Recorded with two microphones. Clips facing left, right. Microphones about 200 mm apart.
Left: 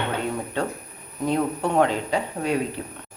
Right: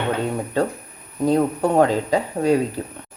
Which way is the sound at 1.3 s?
40° right (ahead or behind).